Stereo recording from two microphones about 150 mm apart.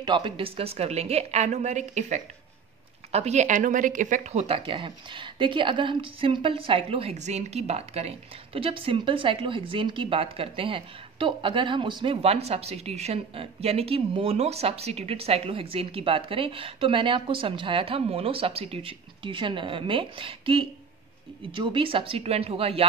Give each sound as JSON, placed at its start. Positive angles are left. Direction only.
{"t": 0.0, "sound": "a woman's voice", "side_deg": -35}